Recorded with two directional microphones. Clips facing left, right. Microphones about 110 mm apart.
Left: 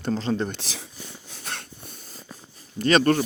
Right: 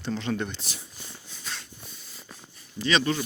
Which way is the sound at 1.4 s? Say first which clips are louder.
Left 4 dB; 55° left (ahead or behind).